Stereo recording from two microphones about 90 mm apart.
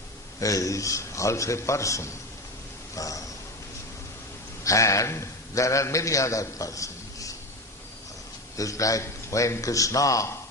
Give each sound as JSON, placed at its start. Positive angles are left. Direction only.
{"t": 0.3, "sound": "a man's voice", "side_deg": 40}
{"t": 2.9, "sound": "a sound", "side_deg": 40}
{"t": 4.6, "sound": "a man's voice", "side_deg": 35}
{"t": 8.5, "sound": "a man's voice", "side_deg": 40}